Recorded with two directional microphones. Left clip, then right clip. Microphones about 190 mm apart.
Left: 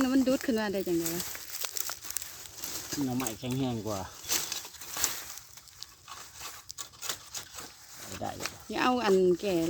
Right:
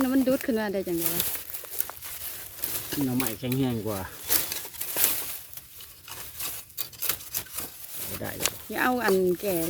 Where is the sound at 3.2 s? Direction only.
60° right (ahead or behind).